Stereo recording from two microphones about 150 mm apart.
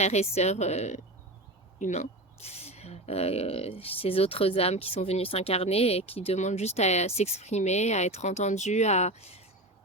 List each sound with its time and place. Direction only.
0.0 s speech: 45° left (ahead or behind)